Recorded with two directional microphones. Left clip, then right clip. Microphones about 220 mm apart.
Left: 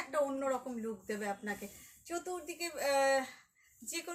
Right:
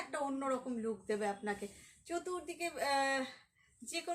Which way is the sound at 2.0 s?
15° right (ahead or behind).